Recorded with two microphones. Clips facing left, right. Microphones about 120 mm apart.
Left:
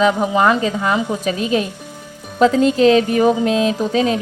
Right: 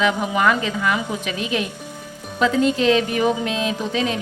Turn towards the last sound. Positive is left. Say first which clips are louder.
# left 6 dB
turn(degrees=35)  # may be behind; listen again after turning